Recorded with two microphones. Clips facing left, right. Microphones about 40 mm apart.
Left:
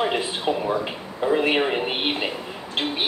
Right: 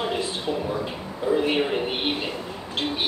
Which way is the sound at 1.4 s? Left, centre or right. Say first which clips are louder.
Left 2 dB; left.